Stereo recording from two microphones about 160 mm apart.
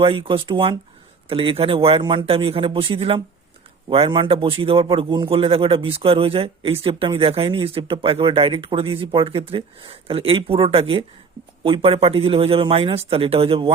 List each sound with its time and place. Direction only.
0.0 s a man's voice: 35° right (ahead or behind)